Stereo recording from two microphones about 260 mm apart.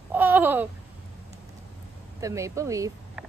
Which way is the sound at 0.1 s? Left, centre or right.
Centre.